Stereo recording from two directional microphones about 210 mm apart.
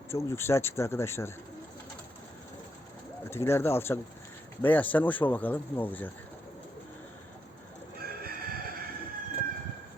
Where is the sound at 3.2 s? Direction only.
10° left (ahead or behind).